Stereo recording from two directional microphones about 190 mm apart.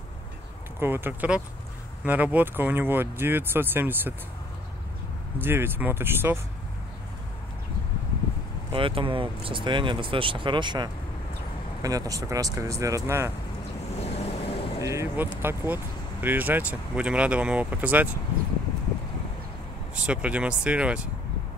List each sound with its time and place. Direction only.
0.7 s speech: 10° right (ahead or behind)
5.4 s speech: 10° right (ahead or behind)
8.7 s speech: 25° right (ahead or behind)
13.9 s vehicle: 35° left (ahead or behind)
14.8 s speech: 15° right (ahead or behind)
20.1 s speech: 5° right (ahead or behind)